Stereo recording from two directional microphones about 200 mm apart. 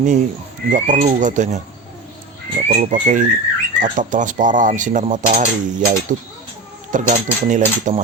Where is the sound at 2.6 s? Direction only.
40° right (ahead or behind).